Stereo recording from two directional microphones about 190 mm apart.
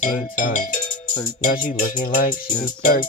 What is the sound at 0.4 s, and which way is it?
Music, 45° left (ahead or behind).